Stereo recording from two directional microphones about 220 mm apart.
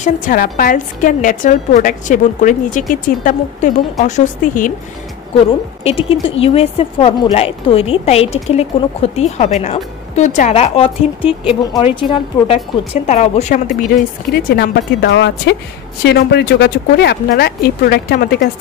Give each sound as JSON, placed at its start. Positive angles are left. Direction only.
{"t": 0.0, "sound": "a woman's voice", "side_deg": 40}
{"t": 5.9, "sound": "a woman's voice", "side_deg": 25}